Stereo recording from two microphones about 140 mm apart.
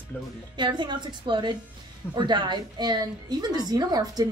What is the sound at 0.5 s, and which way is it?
A woman's voice, 35° right (ahead or behind).